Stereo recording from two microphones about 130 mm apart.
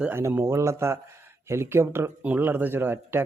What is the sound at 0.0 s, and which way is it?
Speech, 15° right (ahead or behind).